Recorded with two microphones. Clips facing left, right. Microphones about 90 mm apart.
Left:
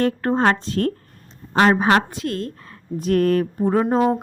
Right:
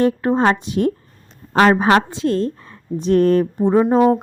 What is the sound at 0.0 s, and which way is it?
Speech, 15° right (ahead or behind).